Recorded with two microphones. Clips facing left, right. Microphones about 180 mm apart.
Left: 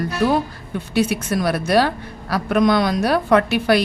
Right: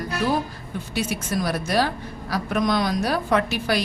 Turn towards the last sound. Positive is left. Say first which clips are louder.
# left 6 dB
turn(degrees=65)  # may be behind; listen again after turning